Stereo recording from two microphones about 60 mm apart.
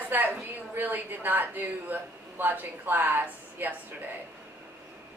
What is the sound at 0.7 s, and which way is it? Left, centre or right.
A woman's voice, right.